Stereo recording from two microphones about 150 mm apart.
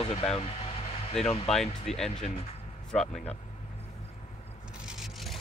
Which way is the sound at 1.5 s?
5° left (ahead or behind).